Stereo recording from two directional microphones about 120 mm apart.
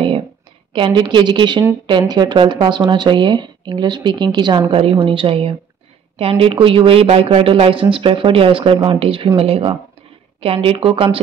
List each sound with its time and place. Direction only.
0.7 s speech: 40° right (ahead or behind)